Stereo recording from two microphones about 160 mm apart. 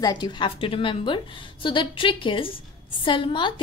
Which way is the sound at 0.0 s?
30° left (ahead or behind).